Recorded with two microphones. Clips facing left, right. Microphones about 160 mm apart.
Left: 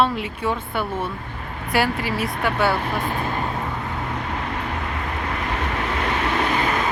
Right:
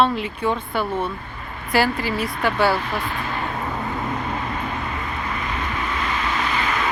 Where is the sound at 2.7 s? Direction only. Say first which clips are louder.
Left 1 dB; 55° left (ahead or behind).